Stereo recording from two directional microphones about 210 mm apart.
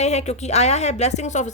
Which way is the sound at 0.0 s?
30° left (ahead or behind).